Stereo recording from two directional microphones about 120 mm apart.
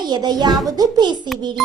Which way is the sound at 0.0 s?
35° right (ahead or behind).